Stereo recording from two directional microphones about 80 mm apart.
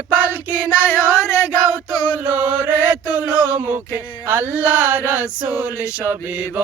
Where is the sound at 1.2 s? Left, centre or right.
Left.